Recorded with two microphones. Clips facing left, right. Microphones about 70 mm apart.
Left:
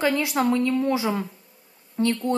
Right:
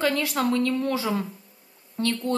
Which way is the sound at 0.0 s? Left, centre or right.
Centre.